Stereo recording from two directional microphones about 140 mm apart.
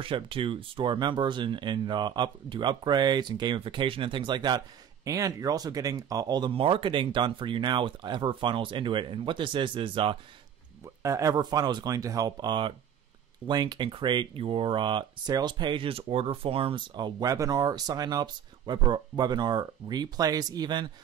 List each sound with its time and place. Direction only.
0.0 s speech: 40° right (ahead or behind)
11.0 s speech: 25° right (ahead or behind)